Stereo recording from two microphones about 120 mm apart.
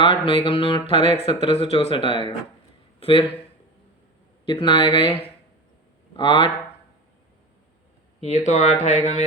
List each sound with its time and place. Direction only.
0.0 s speech: 50° left (ahead or behind)
4.5 s speech: 45° left (ahead or behind)
8.2 s speech: 70° left (ahead or behind)